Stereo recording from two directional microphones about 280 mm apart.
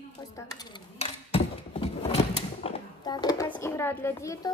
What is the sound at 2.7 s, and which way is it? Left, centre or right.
Speech, centre.